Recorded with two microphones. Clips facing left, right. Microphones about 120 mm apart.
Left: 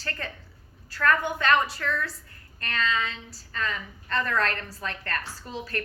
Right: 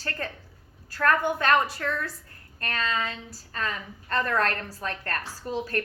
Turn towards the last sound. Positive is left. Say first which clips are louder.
# right 5 dB
turn(degrees=-45)  # may be behind; listen again after turning